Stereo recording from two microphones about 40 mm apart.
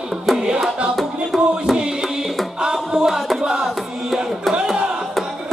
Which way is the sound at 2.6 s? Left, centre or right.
Centre.